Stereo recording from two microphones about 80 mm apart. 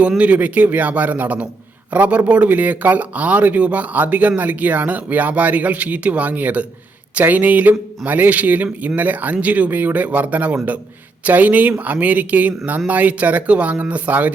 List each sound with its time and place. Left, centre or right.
0.2 s speech: centre